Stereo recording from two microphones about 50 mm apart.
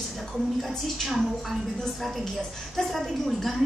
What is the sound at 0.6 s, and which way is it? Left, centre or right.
Speech, centre.